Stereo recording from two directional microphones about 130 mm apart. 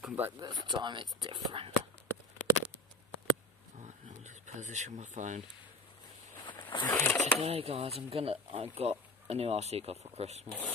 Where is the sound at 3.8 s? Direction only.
65° right (ahead or behind).